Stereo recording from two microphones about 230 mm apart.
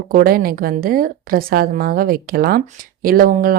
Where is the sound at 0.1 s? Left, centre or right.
Right.